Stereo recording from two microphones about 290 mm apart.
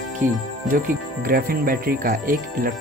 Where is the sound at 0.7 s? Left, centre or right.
Right.